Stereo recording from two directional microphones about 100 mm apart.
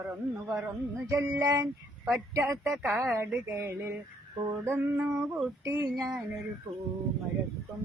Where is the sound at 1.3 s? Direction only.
30° right (ahead or behind).